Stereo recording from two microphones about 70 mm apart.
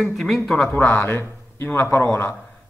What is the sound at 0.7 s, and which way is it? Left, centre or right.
A man's voice, left.